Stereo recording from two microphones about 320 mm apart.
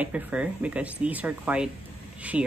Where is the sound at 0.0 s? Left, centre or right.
Centre.